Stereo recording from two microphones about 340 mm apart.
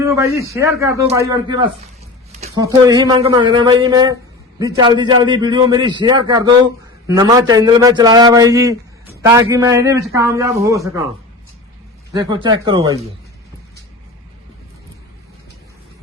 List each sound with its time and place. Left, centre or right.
0.0 s a man's voice: centre
12.1 s a man's voice: centre